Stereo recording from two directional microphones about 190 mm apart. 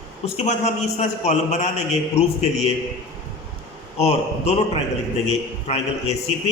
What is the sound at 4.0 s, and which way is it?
A man's voice, 35° left (ahead or behind).